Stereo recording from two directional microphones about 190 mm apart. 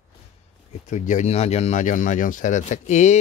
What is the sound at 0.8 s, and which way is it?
Speech, 40° left (ahead or behind).